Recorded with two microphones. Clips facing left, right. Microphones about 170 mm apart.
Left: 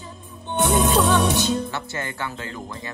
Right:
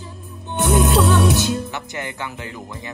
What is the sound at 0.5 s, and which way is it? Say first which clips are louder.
Music: right 2 dB; centre (ahead or behind).